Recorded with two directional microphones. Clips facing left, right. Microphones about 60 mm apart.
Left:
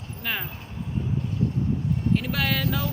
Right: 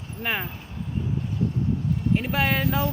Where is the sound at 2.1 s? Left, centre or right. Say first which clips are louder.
Right 2 dB; right.